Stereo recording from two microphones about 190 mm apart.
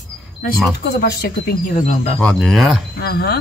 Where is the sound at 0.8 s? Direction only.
55° left (ahead or behind).